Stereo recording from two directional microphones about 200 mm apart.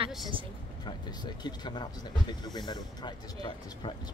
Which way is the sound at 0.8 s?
20° left (ahead or behind).